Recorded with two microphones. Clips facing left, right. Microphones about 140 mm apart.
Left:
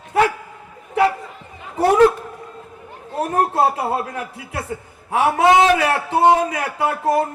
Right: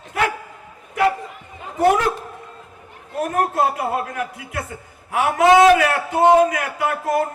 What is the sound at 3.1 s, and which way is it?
A man's voice, 30° left (ahead or behind).